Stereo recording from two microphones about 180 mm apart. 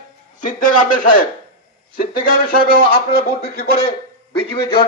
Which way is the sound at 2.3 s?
50° left (ahead or behind).